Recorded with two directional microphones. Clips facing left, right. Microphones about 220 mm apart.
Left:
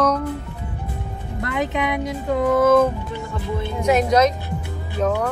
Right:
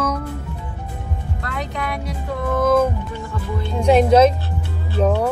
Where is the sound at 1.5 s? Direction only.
20° left (ahead or behind).